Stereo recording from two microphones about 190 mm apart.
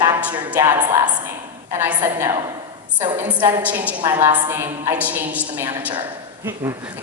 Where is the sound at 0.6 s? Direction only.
20° right (ahead or behind).